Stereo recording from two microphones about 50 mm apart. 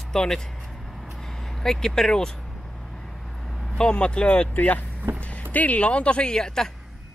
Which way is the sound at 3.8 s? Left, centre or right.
Left.